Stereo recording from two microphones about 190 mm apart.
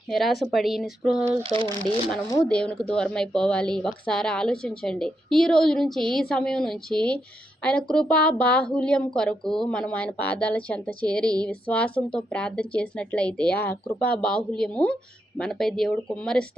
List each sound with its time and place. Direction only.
0.1 s speech: centre (ahead or behind)
1.4 s speech: 25° right (ahead or behind)
2.5 s speech: 5° left (ahead or behind)